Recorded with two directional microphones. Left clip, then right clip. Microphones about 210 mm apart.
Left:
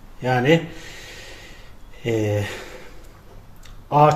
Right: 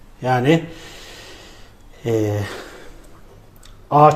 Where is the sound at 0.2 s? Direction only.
20° right (ahead or behind).